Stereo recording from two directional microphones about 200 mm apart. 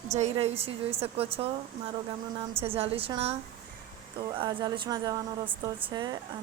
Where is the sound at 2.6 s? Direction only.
30° right (ahead or behind).